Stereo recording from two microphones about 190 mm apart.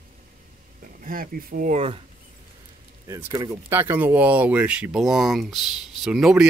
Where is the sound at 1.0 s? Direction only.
50° right (ahead or behind).